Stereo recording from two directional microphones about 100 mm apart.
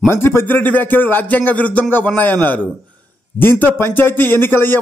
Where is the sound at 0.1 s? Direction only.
25° left (ahead or behind).